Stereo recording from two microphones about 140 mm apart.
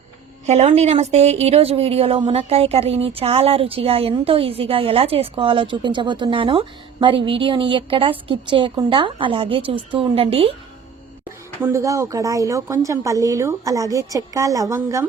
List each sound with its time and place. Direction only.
0.4 s a woman's voice: 50° right (ahead or behind)
11.6 s a woman's voice: 20° right (ahead or behind)